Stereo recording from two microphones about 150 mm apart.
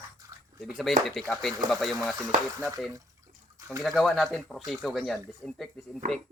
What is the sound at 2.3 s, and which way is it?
Speech, 60° right (ahead or behind).